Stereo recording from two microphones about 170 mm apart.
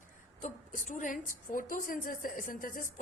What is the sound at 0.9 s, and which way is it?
A woman's voice, 50° left (ahead or behind).